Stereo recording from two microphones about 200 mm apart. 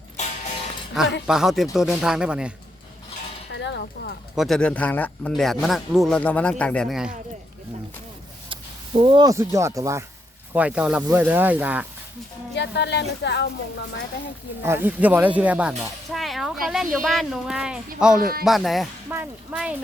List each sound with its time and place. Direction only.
1.0 s speech: centre (ahead or behind)
3.5 s a sound: 65° left (ahead or behind)
4.4 s speech: centre (ahead or behind)
9.0 s speech: 20° right (ahead or behind)
12.5 s speech: 60° left (ahead or behind)
14.6 s speech: 10° right (ahead or behind)
18.2 s speech: 50° right (ahead or behind)
18.4 s speech: centre (ahead or behind)